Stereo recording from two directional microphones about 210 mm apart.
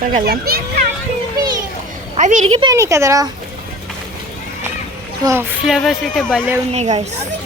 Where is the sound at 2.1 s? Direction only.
35° right (ahead or behind).